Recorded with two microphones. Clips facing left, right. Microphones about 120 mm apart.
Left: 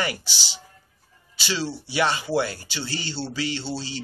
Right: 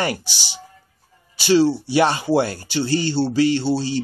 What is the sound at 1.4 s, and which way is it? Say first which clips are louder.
Speech: right 13 dB; 50° right (ahead or behind).